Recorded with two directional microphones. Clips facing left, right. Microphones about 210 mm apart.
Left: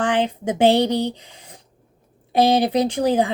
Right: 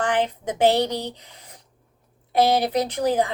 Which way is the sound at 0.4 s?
30° left (ahead or behind).